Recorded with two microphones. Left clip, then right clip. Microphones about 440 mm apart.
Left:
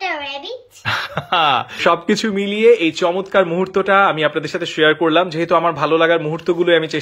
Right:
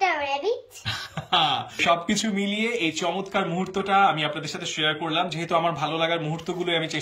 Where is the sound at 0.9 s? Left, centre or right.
Centre.